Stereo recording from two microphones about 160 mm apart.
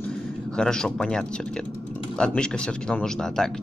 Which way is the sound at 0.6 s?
5° left (ahead or behind).